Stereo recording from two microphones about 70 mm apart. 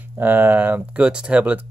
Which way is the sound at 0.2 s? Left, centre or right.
Right.